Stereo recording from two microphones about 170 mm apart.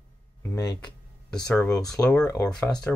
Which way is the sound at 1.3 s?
5° left (ahead or behind).